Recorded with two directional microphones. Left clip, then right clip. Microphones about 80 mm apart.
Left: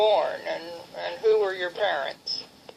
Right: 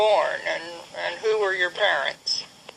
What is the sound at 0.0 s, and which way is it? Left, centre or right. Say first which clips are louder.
Radio: right 2 dB; right.